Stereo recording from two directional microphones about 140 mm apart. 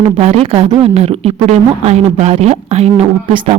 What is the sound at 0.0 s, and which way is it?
Speech, 50° right (ahead or behind).